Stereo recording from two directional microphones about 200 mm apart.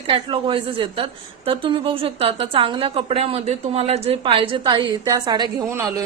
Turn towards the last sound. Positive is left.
turn(degrees=-15)  # may be behind; listen again after turning